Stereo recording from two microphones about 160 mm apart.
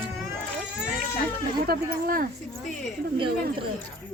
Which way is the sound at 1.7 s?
60° right (ahead or behind).